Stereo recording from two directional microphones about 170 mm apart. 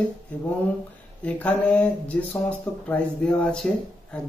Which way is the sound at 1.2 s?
10° left (ahead or behind).